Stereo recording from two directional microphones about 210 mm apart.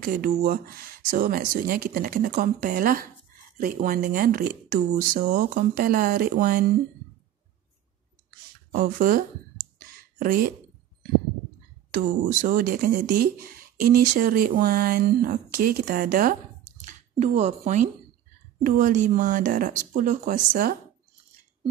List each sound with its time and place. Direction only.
0.0 s speech: 45° right (ahead or behind)
8.7 s speech: 40° right (ahead or behind)
12.0 s speech: 40° right (ahead or behind)
17.2 s speech: 30° right (ahead or behind)